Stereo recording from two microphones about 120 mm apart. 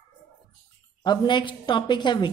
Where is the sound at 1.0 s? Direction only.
40° left (ahead or behind).